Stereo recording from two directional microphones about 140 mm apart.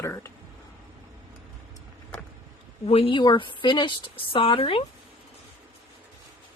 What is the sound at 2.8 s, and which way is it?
Speech, 45° left (ahead or behind).